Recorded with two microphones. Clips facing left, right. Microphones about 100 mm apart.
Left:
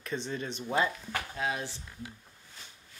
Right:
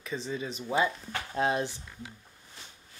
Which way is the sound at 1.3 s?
35° right (ahead or behind).